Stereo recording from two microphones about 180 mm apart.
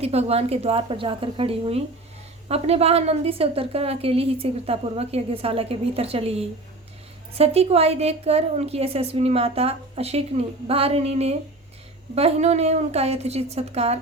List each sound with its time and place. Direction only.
0.0 s a woman's voice: 35° right (ahead or behind)